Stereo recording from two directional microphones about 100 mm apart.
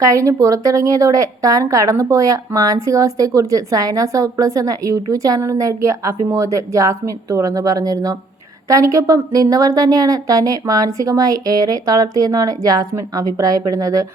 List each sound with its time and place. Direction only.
0.0 s a woman's voice: 35° right (ahead or behind)